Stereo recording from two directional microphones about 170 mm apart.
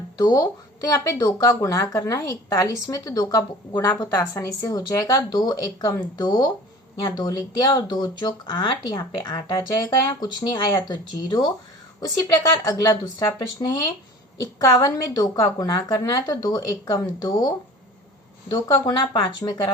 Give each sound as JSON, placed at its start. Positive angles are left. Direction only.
{"t": 0.2, "sound": "a woman's voice", "side_deg": 20}
{"t": 14.8, "sound": "a woman's voice", "side_deg": 25}